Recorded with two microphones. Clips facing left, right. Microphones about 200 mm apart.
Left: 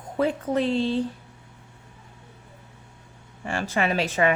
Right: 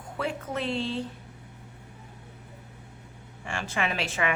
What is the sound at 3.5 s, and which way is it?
Speech, 40° left (ahead or behind).